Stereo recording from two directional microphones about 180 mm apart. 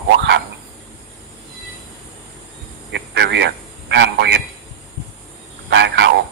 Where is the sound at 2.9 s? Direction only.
70° right (ahead or behind).